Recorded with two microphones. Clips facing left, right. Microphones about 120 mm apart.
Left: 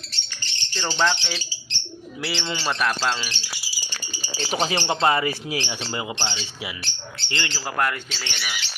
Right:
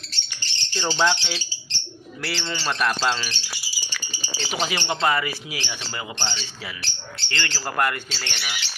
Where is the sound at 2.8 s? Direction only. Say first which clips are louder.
Right 3 dB; centre (ahead or behind).